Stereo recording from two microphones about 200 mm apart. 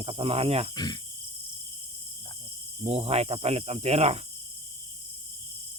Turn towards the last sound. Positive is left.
turn(degrees=-30)  # may be behind; listen again after turning